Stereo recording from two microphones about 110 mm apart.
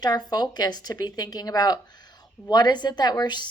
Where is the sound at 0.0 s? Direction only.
40° left (ahead or behind).